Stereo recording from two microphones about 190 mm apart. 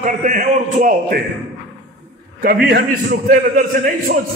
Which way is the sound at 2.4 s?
55° right (ahead or behind).